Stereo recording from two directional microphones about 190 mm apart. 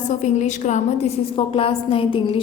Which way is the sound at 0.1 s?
40° left (ahead or behind).